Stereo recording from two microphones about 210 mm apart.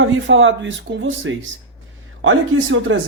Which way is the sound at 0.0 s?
60° right (ahead or behind).